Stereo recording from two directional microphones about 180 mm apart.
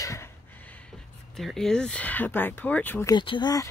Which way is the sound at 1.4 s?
Centre (ahead or behind).